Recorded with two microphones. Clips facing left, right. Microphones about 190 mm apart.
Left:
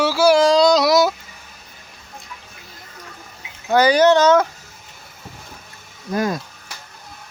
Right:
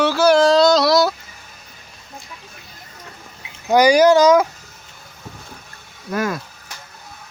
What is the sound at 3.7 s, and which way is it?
Speech, 10° right (ahead or behind).